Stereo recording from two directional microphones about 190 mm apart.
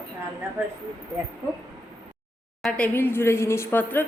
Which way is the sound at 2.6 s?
5° left (ahead or behind).